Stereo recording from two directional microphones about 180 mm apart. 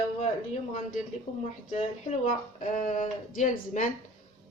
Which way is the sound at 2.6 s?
45° left (ahead or behind).